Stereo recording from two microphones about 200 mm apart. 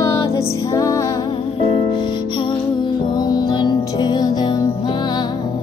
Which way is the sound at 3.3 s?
20° left (ahead or behind).